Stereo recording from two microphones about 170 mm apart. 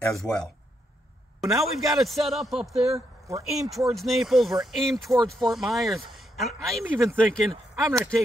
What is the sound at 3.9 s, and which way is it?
Speech, centre (ahead or behind).